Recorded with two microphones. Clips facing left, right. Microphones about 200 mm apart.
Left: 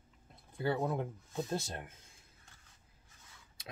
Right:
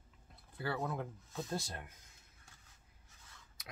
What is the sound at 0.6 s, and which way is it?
Speech, 20° left (ahead or behind).